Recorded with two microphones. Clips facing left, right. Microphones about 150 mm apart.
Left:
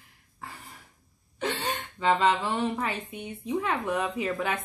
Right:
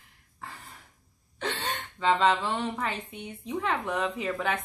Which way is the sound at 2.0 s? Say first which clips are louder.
Even; 10° left (ahead or behind).